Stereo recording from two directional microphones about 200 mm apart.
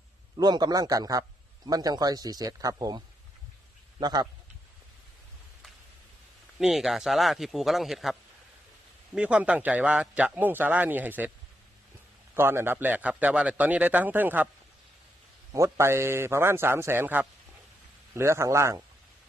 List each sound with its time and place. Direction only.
0.4 s speech: 20° right (ahead or behind)
4.0 s speech: 20° right (ahead or behind)
6.6 s speech: centre (ahead or behind)
12.4 s speech: 10° right (ahead or behind)
15.5 s speech: 15° right (ahead or behind)